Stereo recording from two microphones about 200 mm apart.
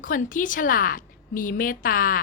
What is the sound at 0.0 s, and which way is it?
A woman's voice, 40° left (ahead or behind).